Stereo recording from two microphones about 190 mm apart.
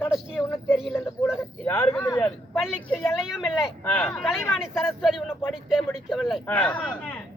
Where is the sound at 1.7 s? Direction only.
10° left (ahead or behind).